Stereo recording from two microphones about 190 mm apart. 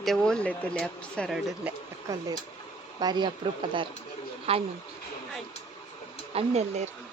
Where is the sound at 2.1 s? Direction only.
15° right (ahead or behind).